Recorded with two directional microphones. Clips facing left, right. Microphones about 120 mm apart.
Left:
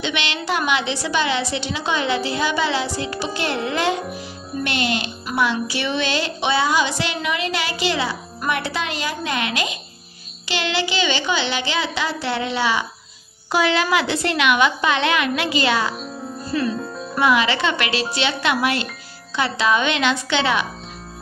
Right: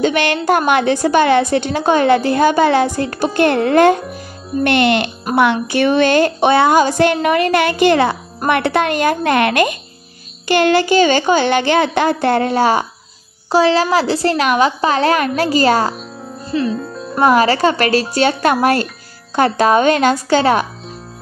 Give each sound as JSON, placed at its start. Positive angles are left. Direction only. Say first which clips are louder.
{"t": 0.0, "sound": "speech", "louder": "right 10 dB", "side_deg": -45}
{"t": 13.5, "sound": "a woman's voice", "louder": "right 6 dB", "side_deg": -35}
{"t": 16.4, "sound": "music", "louder": "right 4 dB", "side_deg": -25}
{"t": 17.2, "sound": "speech", "louder": "right 7 dB", "side_deg": -40}